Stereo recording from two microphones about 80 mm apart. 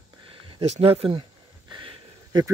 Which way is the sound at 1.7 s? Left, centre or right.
Right.